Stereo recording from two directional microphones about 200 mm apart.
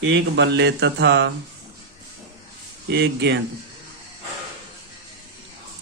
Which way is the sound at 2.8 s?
55° right (ahead or behind).